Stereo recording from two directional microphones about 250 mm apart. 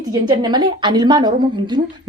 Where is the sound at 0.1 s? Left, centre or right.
Centre.